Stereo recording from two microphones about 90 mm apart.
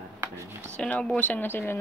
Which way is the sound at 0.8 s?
15° left (ahead or behind).